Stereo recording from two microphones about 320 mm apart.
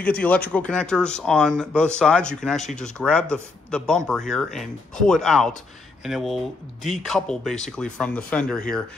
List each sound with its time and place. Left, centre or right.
0.0 s speech: centre